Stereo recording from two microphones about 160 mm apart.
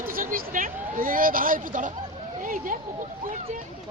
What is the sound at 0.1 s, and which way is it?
Speech, 60° right (ahead or behind).